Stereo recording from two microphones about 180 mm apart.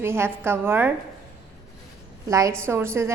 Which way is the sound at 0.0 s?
15° right (ahead or behind).